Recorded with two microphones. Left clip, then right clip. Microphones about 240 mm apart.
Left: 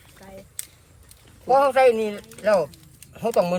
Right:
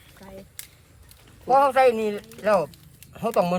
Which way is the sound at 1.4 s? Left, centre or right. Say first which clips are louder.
Left 1 dB; centre.